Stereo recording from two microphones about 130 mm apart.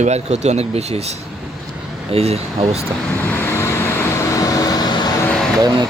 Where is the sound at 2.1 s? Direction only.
50° right (ahead or behind).